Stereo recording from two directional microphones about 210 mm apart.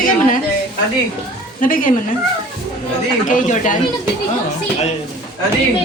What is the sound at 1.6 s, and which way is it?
Speech, 40° left (ahead or behind).